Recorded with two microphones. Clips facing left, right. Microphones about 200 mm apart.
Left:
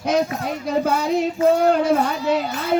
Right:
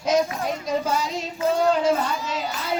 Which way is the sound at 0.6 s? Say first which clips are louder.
Left 6 dB; 60° left (ahead or behind).